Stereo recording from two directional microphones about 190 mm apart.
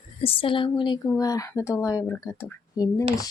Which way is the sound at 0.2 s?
30° left (ahead or behind).